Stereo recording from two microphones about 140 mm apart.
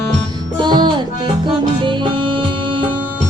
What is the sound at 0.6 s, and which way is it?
Music, 30° right (ahead or behind).